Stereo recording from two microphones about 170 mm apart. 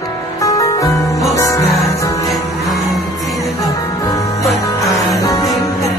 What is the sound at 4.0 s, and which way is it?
Music, 20° left (ahead or behind).